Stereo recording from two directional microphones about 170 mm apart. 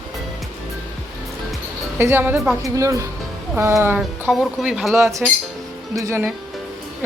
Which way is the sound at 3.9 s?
Centre (ahead or behind).